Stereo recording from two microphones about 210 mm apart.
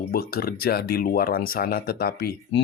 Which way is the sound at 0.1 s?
45° left (ahead or behind).